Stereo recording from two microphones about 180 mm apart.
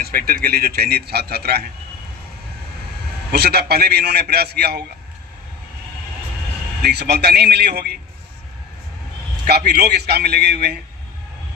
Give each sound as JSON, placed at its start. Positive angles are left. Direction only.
{"t": 0.0, "sound": "a man's voice", "side_deg": -55}
{"t": 3.3, "sound": "a man's voice", "side_deg": -65}
{"t": 6.8, "sound": "a man's voice", "side_deg": -65}
{"t": 9.5, "sound": "a man's voice", "side_deg": -65}